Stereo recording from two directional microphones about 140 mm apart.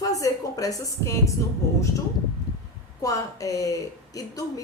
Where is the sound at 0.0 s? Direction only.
25° left (ahead or behind).